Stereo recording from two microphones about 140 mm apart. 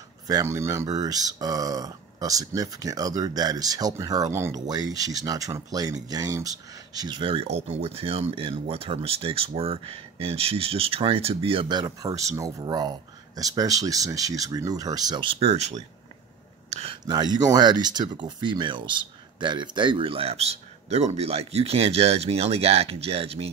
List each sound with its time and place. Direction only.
0.3 s speech: 20° right (ahead or behind); by 11.8 s 40° right (ahead or behind)
11.8 s speech: 25° right (ahead or behind)
15.3 s speech: 50° right (ahead or behind)
16.7 s speech: 40° right (ahead or behind)
17.0 s speech: 30° right (ahead or behind); by 23.5 s 45° right (ahead or behind)